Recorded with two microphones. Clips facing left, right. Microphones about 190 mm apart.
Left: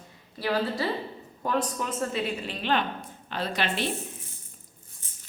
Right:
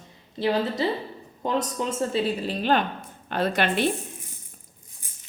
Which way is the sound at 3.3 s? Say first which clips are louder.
Right 6 dB; 55° right (ahead or behind).